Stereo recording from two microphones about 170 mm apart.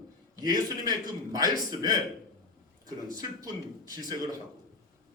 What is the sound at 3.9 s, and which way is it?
Speech, 25° right (ahead or behind).